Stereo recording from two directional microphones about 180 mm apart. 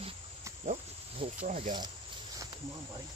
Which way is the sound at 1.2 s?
35° right (ahead or behind).